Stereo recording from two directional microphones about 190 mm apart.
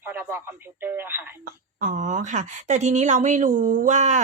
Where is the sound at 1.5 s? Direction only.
40° right (ahead or behind).